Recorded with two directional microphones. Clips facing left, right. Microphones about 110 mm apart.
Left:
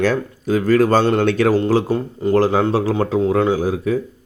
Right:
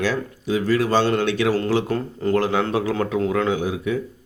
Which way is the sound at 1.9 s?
15° left (ahead or behind).